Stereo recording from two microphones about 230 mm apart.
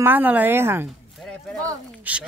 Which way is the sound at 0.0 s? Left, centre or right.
Centre.